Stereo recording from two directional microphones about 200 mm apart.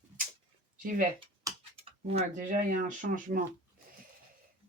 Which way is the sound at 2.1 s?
40° right (ahead or behind).